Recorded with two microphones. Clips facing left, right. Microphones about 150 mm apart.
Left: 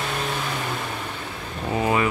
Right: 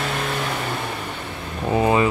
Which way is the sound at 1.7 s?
25° right (ahead or behind).